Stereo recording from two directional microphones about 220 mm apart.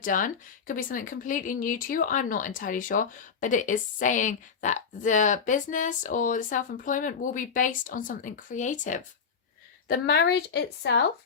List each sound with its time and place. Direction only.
0.0 s speech: 35° left (ahead or behind)
9.9 s speech: 50° left (ahead or behind)